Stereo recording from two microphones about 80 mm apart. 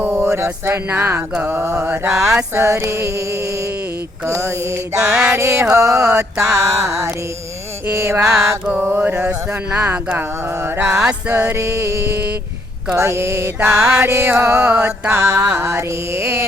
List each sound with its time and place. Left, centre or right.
0.0 s a sound: right
1.8 s music: right
4.4 s music: right
5.0 s music: centre
5.3 s music: right
8.8 s a sound: right
11.3 s music: right